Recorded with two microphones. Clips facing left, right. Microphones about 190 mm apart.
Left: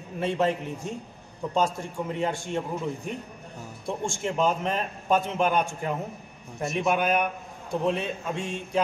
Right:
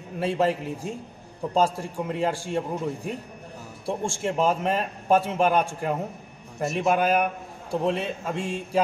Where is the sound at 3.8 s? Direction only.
30° right (ahead or behind).